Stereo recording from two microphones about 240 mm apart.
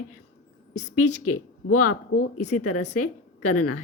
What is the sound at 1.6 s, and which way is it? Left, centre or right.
Speech, left.